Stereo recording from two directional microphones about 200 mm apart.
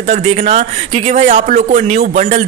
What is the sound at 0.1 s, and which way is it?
Speech, 35° right (ahead or behind).